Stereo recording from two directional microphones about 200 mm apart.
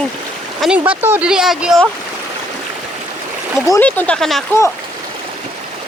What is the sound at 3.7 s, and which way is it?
Speech, 10° left (ahead or behind).